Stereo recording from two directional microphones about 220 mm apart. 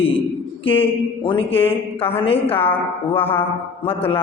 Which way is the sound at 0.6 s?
25° left (ahead or behind).